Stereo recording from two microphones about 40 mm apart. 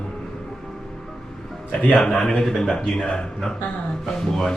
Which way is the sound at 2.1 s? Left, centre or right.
Centre.